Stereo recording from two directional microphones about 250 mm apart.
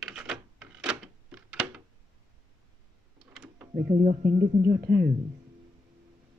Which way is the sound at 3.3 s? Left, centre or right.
Centre.